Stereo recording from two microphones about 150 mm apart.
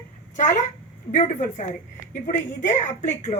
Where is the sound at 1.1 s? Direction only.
55° left (ahead or behind).